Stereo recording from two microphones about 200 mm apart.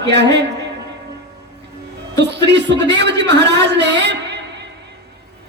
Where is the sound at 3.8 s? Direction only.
60° right (ahead or behind).